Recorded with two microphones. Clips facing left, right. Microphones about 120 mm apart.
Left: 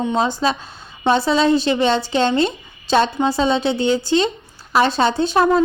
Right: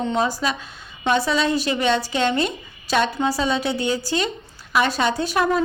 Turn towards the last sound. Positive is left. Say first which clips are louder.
# left 5 dB
turn(degrees=30)  # may be behind; listen again after turning